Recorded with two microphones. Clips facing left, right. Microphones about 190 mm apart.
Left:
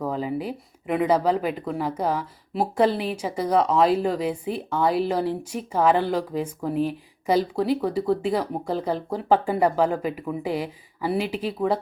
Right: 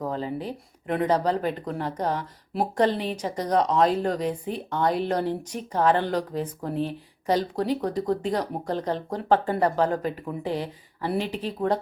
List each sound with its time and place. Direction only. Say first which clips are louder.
0.1 s speech: left 3 dB; 10° left (ahead or behind)